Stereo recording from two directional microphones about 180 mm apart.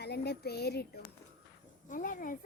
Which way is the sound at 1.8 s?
45° left (ahead or behind).